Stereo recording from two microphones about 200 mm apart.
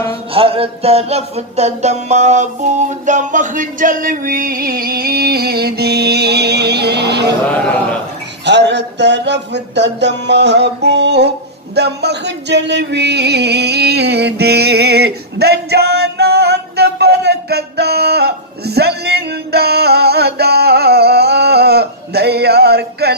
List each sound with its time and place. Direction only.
0.3 s music: 30° right (ahead or behind); by 7.3 s 55° right (ahead or behind)
7.4 s a man's voice: 5° left (ahead or behind)
8.5 s music: 60° right (ahead or behind)
11.7 s a sound: 55° right (ahead or behind)